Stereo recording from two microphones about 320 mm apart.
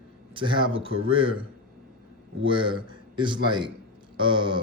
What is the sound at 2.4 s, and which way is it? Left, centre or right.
A man's voice, centre.